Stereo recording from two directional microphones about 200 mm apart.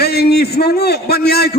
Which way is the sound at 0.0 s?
50° left (ahead or behind).